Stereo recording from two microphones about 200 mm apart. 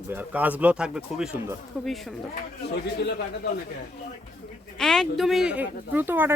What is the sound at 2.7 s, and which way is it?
Speech, 55° left (ahead or behind).